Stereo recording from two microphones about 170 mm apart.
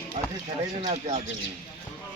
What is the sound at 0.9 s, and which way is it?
Speech, 40° right (ahead or behind).